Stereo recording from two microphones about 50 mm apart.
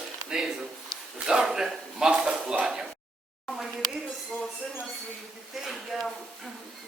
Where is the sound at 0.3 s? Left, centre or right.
Centre.